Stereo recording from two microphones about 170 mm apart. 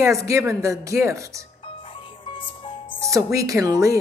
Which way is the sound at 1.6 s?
30° left (ahead or behind).